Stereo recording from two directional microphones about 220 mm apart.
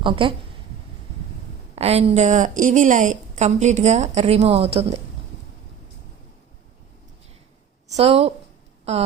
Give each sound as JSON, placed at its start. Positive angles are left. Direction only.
{"t": 0.0, "sound": "a woman's voice", "side_deg": -25}
{"t": 1.7, "sound": "a woman's voice", "side_deg": -30}
{"t": 7.9, "sound": "a woman's voice", "side_deg": -30}
{"t": 8.8, "sound": "a sound", "side_deg": -30}